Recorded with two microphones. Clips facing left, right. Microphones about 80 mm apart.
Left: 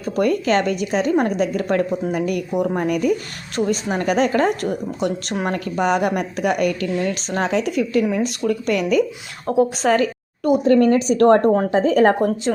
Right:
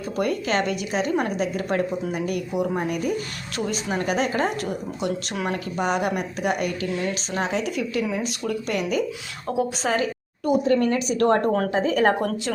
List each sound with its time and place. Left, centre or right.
0.2 s speech: left
3.7 s a woman's voice: left
10.7 s speech: left
12.5 s speech: centre